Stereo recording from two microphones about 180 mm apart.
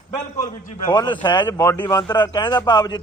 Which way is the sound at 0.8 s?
20° left (ahead or behind).